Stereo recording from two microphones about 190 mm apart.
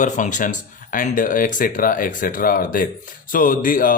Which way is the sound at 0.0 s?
40° left (ahead or behind).